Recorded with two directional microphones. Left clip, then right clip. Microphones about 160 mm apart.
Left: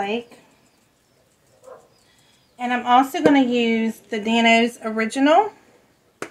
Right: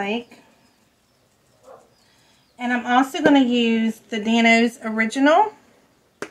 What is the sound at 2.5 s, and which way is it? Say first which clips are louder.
A woman's voice: left 2 dB; 20° right (ahead or behind).